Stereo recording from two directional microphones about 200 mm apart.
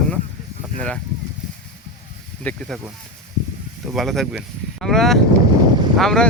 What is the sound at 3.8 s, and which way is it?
Speech, centre (ahead or behind).